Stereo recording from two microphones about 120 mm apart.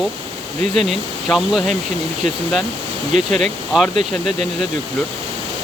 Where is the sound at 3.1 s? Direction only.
70° right (ahead or behind).